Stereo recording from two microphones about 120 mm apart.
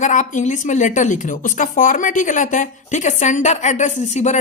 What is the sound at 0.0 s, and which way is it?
A woman's voice, 90° left.